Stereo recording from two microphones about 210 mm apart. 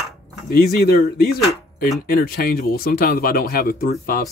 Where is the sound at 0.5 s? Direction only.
45° left (ahead or behind).